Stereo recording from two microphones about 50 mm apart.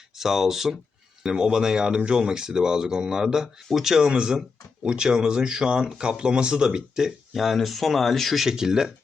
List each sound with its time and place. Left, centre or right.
0.2 s speech: centre
7.3 s speech: centre